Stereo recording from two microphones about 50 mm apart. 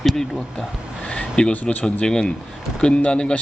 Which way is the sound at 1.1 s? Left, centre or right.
Centre.